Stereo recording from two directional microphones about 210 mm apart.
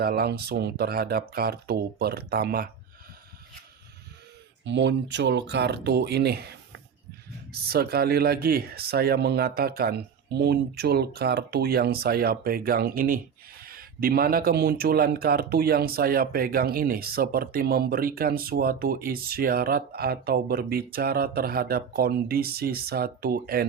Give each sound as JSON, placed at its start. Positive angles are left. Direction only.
{"t": 0.0, "sound": "speech", "side_deg": -45}
{"t": 4.6, "sound": "speech", "side_deg": -60}